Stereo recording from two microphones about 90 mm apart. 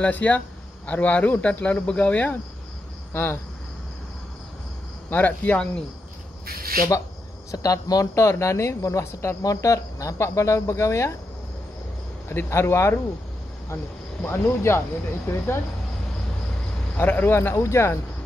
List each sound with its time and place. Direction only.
0.0 s speech: 15° left (ahead or behind)
5.1 s speech: 20° left (ahead or behind)
7.5 s speech: 40° left (ahead or behind)
12.3 s speech: 25° left (ahead or behind)
14.2 s speech: 25° left (ahead or behind)
16.9 s speech: 20° left (ahead or behind)